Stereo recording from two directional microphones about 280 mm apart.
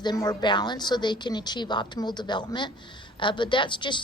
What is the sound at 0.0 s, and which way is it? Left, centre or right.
A woman's voice, centre.